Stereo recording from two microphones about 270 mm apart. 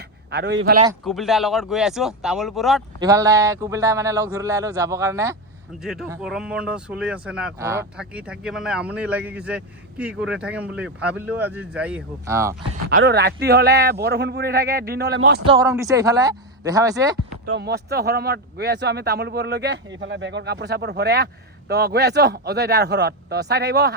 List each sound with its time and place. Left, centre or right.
0.3 s speech: right
1.0 s speech: centre
3.0 s speech: centre
13.0 s speech: right
15.4 s speech: centre
17.4 s speech: right